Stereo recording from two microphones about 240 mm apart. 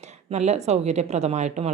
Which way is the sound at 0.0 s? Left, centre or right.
Right.